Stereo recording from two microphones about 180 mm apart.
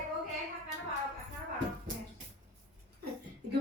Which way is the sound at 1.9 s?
45° right (ahead or behind).